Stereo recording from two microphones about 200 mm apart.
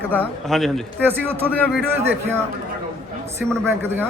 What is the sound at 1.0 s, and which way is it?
Speech, 10° right (ahead or behind).